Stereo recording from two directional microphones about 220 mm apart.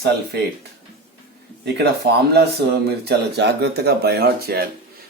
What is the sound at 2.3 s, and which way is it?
Speech, 45° right (ahead or behind).